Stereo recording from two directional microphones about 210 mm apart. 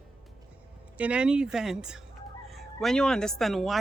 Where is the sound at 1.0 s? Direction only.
5° right (ahead or behind).